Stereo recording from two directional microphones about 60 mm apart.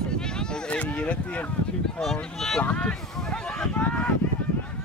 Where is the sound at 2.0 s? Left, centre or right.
Centre.